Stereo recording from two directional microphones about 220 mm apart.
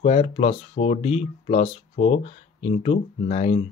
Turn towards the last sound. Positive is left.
turn(degrees=30)  # may be behind; listen again after turning